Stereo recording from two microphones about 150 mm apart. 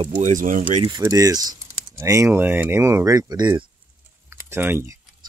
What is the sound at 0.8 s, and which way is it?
Speech, 25° right (ahead or behind).